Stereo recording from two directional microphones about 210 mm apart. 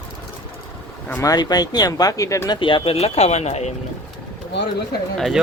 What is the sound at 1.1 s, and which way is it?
Speech, 15° left (ahead or behind).